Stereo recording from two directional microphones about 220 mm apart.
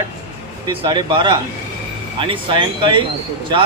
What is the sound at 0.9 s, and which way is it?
A man's voice, 20° right (ahead or behind).